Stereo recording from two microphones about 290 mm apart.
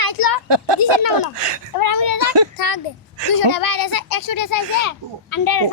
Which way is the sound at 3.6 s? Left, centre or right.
Left.